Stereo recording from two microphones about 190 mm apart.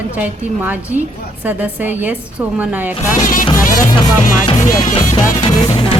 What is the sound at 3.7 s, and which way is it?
Music, 20° left (ahead or behind).